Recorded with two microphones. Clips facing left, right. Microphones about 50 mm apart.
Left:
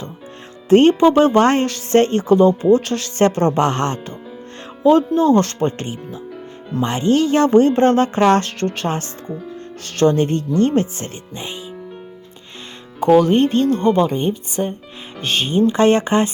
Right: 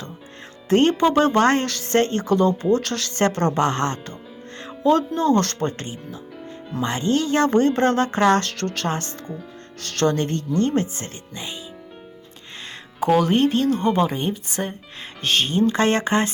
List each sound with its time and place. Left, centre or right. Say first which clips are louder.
0.7 s speech: left 6 dB; left
3.6 s speech: left 3 dB; left
4.8 s speech: left 5 dB; left
10.7 s speech: left 4 dB; left
13.0 s speech: left 5 dB; centre